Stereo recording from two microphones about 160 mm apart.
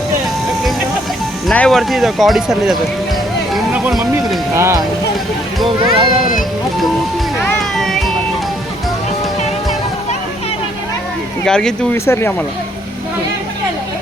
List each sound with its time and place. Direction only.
1.5 s speech: 5° left (ahead or behind)
3.5 s music: 5° right (ahead or behind)
4.5 s speech: 20° right (ahead or behind)
5.6 s speech: 30° right (ahead or behind)
6.3 s speech: centre (ahead or behind)
7.8 s music: centre (ahead or behind)
11.4 s speech: 5° left (ahead or behind)
12.0 s speech: 15° left (ahead or behind)